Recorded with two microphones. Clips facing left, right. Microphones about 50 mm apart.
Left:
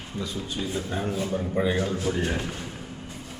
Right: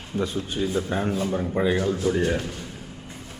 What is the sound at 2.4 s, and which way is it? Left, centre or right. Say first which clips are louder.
Speech: right 1 dB; centre.